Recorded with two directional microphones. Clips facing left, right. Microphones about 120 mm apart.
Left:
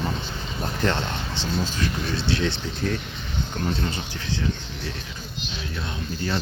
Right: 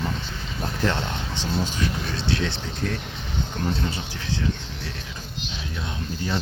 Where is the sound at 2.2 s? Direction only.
Centre (ahead or behind).